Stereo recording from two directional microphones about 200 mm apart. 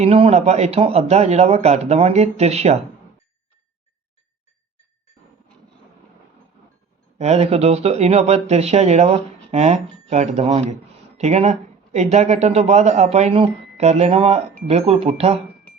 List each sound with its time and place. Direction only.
0.0 s speech: 30° right (ahead or behind)
7.2 s speech: 30° right (ahead or behind)